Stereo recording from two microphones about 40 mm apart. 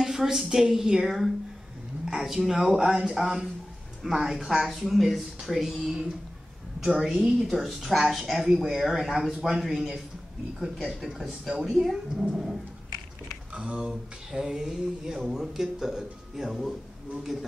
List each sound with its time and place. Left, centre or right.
0.0 s a sound: centre
0.4 s speech: centre
4.6 s speech: centre
5.9 s a woman's voice: centre
13.6 s speech: right
14.3 s speech: centre